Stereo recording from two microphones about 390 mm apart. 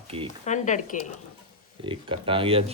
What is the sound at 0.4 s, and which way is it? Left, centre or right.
Speech, centre.